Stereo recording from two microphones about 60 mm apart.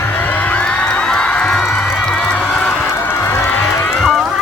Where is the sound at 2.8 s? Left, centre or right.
Left.